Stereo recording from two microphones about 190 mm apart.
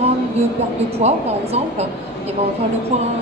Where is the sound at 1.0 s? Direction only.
35° right (ahead or behind).